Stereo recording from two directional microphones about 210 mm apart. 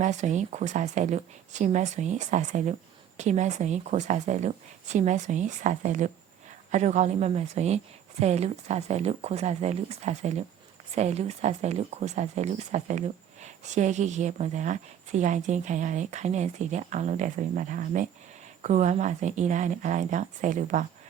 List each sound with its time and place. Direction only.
0.0 s speech: 35° right (ahead or behind)